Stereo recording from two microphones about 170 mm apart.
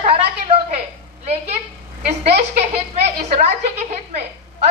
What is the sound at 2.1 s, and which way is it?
A woman's voice, 40° right (ahead or behind).